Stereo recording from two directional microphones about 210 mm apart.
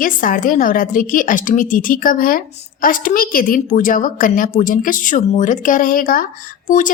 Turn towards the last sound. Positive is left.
turn(degrees=40)  # may be behind; listen again after turning